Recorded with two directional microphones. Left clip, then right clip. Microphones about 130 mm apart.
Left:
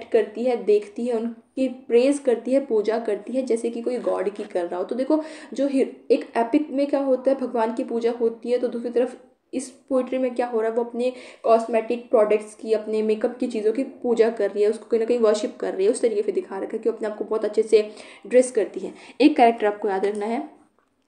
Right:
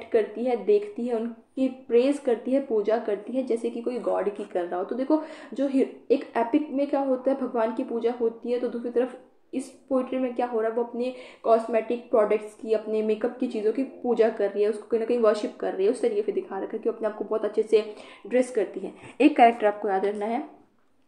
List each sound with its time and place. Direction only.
0.1 s a woman's voice: 30° left (ahead or behind)